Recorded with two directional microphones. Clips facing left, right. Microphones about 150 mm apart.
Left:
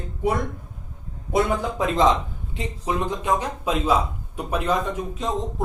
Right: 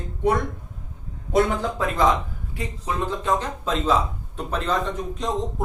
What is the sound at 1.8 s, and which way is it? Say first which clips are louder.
A man's voice: left 2 dB; 15° left (ahead or behind).